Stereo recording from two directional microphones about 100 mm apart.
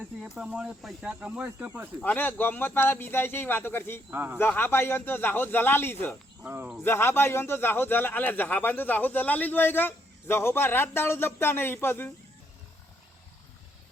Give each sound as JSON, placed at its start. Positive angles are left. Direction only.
{"t": 0.2, "sound": "speech", "side_deg": -5}
{"t": 1.0, "sound": "speech", "side_deg": -15}
{"t": 2.0, "sound": "a man's voice", "side_deg": 15}
{"t": 4.1, "sound": "speech", "side_deg": -20}
{"t": 4.4, "sound": "a man's voice", "side_deg": 20}
{"t": 6.4, "sound": "speech", "side_deg": -25}
{"t": 6.8, "sound": "a man's voice", "side_deg": 25}